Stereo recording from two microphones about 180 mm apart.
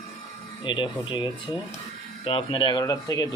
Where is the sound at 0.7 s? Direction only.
25° left (ahead or behind).